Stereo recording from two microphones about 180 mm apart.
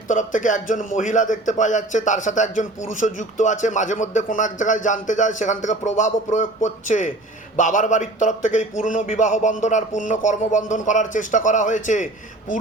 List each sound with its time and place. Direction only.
0.1 s speech: 45° left (ahead or behind)